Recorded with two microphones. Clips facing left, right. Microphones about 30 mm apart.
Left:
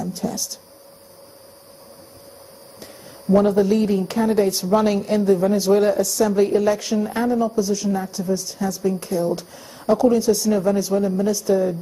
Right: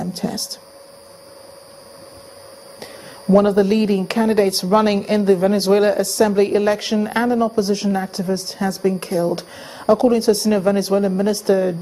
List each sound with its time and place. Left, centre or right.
0.0 s speech: right
2.8 s speech: right